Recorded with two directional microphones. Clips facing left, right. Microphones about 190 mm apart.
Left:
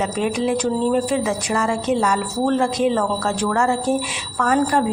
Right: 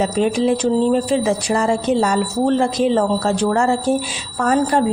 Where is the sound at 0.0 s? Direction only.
30° right (ahead or behind).